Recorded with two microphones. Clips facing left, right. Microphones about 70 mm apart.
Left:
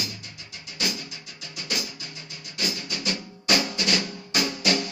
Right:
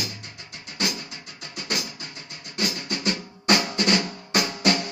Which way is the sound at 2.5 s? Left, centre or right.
Right.